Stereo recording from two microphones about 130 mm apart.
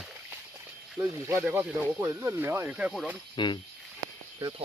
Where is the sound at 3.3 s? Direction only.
35° left (ahead or behind).